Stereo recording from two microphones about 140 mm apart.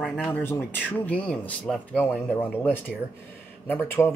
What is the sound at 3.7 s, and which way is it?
Speech, 15° left (ahead or behind).